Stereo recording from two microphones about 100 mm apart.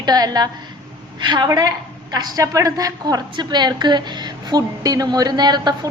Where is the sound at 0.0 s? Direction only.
40° right (ahead or behind).